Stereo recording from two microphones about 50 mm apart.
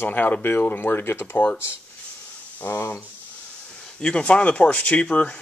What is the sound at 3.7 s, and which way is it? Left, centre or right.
Speech, left.